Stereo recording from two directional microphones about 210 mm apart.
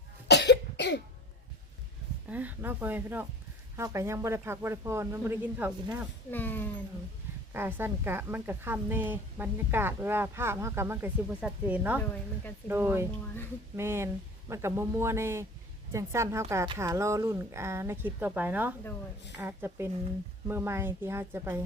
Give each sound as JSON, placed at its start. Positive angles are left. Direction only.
{"t": 0.3, "sound": "cough", "side_deg": 55}
{"t": 2.3, "sound": "a woman's voice", "side_deg": -5}
{"t": 6.3, "sound": "speech", "side_deg": 10}
{"t": 7.5, "sound": "a woman's voice", "side_deg": -10}